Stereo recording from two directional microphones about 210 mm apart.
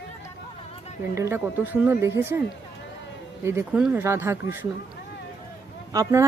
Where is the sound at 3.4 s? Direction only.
10° right (ahead or behind).